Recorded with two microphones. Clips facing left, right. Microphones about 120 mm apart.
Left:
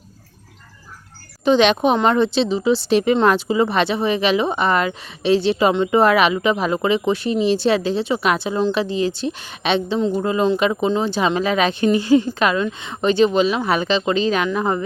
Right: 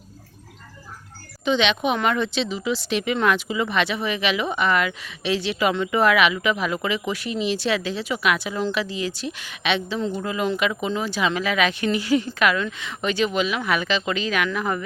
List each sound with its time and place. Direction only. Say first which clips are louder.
1.5 s speech: left 6 dB; 40° left (ahead or behind)